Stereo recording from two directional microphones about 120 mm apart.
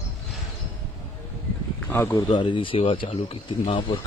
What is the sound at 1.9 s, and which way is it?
Speech, 15° left (ahead or behind).